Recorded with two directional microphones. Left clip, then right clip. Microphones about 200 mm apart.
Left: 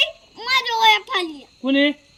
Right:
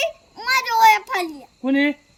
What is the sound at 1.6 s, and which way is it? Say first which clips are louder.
Speech: left 2 dB; 20° right (ahead or behind).